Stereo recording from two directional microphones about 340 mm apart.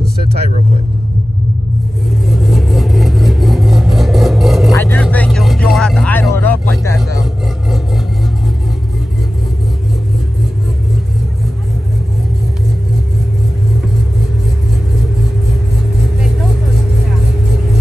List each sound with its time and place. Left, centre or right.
0.0 s vehicle: right
2.2 s vehicle: centre
6.8 s a sound: centre